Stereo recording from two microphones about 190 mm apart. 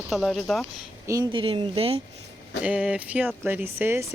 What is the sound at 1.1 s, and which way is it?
Speech, 20° right (ahead or behind).